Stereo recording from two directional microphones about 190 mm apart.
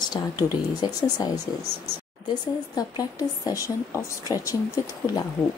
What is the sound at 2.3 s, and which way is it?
A woman's voice, 20° left (ahead or behind).